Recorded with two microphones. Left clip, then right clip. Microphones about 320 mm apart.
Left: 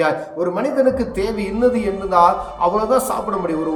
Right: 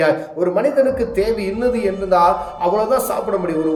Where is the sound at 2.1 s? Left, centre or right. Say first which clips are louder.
Left 1 dB; left.